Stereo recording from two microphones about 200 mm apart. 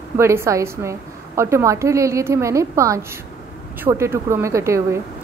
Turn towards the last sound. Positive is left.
turn(degrees=-15)  # may be behind; listen again after turning